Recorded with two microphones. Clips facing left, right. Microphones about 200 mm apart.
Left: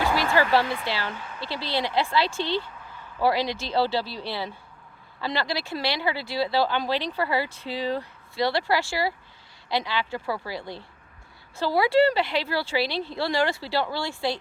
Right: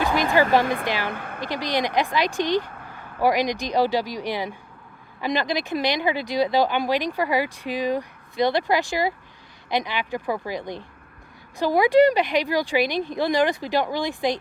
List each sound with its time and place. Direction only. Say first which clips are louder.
0.0 s speech: right 3 dB; 15° right (ahead or behind)
0.6 s speech: right 4 dB; 50° right (ahead or behind)
0.9 s speech: right 4 dB; 15° right (ahead or behind)
1.1 s speech: right 5 dB; 55° right (ahead or behind)
1.4 s speech: right 3 dB; 15° right (ahead or behind)
2.6 s vehicle: right 3 dB; 55° right (ahead or behind)
3.2 s speech: right 3 dB; 15° right (ahead or behind)